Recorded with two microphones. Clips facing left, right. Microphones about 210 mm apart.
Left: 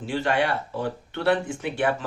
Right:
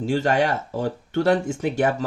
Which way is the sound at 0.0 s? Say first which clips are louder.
Right 4 dB; 40° right (ahead or behind).